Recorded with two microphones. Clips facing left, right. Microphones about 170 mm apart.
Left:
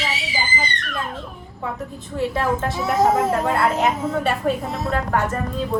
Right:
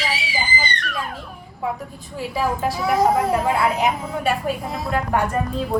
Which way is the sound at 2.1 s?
Centre (ahead or behind).